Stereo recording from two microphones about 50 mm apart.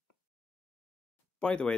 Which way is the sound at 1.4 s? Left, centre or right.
Centre.